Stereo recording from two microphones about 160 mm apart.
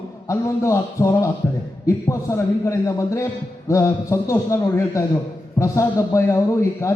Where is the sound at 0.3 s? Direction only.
20° left (ahead or behind).